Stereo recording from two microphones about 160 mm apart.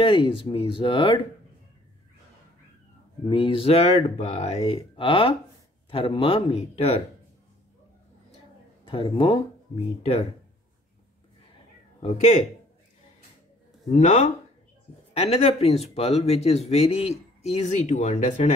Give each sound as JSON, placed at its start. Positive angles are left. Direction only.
{"t": 0.0, "sound": "speech", "side_deg": 30}
{"t": 3.3, "sound": "speech", "side_deg": 35}
{"t": 8.8, "sound": "speech", "side_deg": 35}
{"t": 13.8, "sound": "speech", "side_deg": 45}